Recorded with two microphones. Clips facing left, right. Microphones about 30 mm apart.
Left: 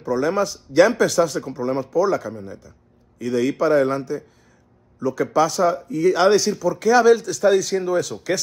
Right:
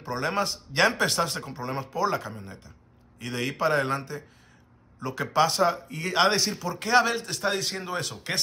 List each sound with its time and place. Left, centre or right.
0.0 s speech: right